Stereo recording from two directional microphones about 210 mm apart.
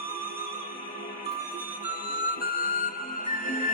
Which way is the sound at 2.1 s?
40° left (ahead or behind).